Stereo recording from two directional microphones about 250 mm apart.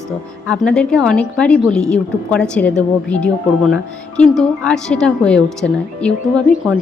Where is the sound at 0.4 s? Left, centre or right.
Centre.